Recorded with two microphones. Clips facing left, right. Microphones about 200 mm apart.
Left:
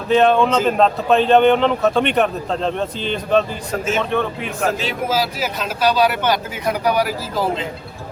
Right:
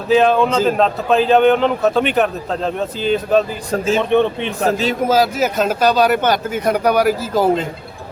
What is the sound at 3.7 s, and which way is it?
Speech, 30° right (ahead or behind).